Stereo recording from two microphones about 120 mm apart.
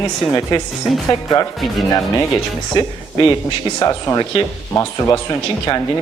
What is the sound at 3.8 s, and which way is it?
Speech, 30° left (ahead or behind).